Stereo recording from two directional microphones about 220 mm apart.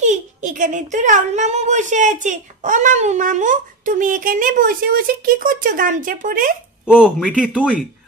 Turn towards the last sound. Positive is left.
turn(degrees=-5)  # may be behind; listen again after turning